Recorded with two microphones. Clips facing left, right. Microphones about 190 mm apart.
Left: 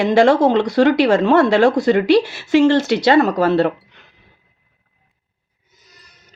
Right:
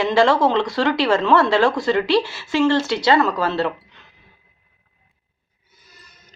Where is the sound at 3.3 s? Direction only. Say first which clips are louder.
Left 6 dB; 55° left (ahead or behind).